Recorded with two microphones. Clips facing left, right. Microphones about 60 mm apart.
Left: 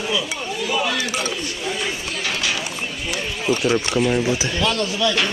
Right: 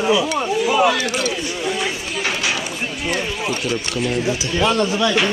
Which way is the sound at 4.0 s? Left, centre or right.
Centre.